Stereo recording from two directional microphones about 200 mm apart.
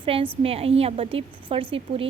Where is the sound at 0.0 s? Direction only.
25° right (ahead or behind).